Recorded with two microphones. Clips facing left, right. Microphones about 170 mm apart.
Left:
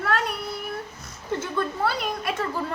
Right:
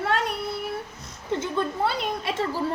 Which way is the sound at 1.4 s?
20° right (ahead or behind).